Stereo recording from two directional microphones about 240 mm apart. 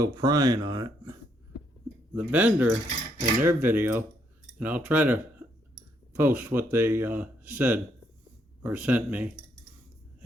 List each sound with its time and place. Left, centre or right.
0.0 s speech: centre
2.1 s speech: centre